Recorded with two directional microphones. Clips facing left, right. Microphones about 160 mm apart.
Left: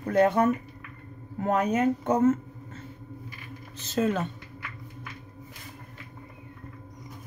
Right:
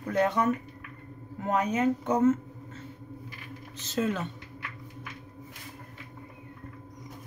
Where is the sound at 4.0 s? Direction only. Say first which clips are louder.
Left 3 dB; 45° left (ahead or behind).